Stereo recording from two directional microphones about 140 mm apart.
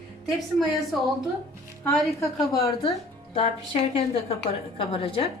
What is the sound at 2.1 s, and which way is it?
Speech, 25° left (ahead or behind).